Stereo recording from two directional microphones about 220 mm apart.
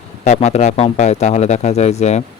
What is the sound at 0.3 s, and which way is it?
Speech, 30° left (ahead or behind).